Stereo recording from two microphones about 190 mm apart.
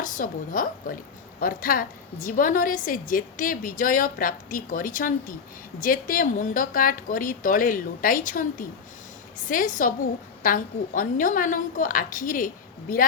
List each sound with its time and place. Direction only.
0.0 s a woman's voice: 45° left (ahead or behind)